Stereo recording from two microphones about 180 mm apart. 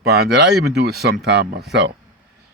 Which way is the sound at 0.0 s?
65° right (ahead or behind).